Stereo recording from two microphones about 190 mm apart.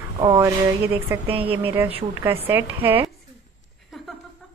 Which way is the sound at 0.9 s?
10° right (ahead or behind).